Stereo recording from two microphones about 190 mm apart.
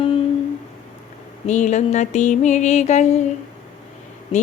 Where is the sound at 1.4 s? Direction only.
40° left (ahead or behind).